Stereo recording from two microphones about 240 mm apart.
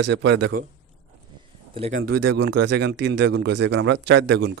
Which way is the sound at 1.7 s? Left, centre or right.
Right.